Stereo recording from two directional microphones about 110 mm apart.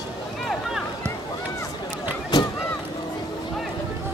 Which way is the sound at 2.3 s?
40° left (ahead or behind).